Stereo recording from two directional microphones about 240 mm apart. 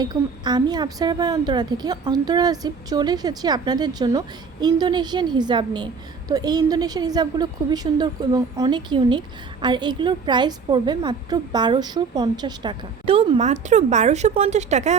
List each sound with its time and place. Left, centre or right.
0.0 s a woman's voice: centre